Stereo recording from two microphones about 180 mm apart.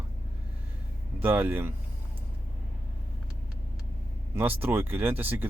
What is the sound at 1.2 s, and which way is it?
Speech, 10° right (ahead or behind).